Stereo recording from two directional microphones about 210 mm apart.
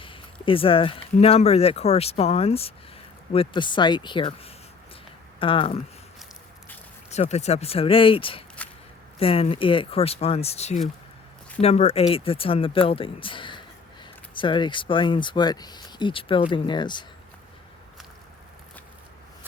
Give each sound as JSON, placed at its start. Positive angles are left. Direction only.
{"t": 0.0, "sound": "speech", "side_deg": 25}
{"t": 7.1, "sound": "speech", "side_deg": 30}